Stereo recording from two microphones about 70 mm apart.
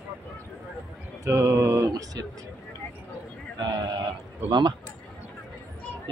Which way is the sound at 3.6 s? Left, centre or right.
Right.